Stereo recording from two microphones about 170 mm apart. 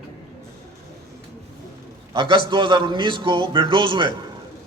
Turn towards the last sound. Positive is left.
turn(degrees=-30)  # may be behind; listen again after turning